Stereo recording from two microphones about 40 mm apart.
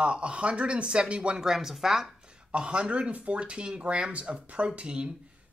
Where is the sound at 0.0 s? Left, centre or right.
Right.